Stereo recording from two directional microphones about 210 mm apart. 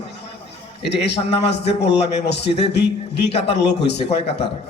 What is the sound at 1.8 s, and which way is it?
Speech, 55° left (ahead or behind).